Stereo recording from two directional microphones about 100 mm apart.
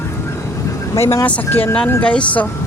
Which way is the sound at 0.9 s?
30° left (ahead or behind).